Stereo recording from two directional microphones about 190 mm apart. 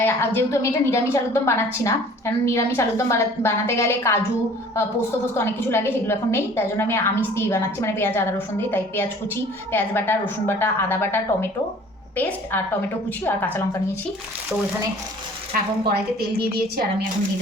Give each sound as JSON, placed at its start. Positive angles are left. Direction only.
{"t": 0.0, "sound": "a woman's voice", "side_deg": 10}
{"t": 16.4, "sound": "a woman's voice", "side_deg": -55}